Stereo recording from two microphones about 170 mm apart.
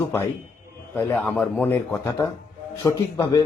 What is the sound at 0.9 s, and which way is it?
A man's voice, 15° left (ahead or behind).